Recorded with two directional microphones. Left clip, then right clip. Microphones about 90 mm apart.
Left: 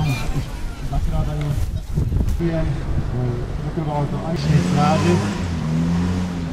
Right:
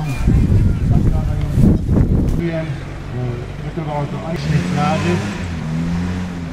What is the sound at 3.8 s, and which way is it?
Speech, 30° right (ahead or behind).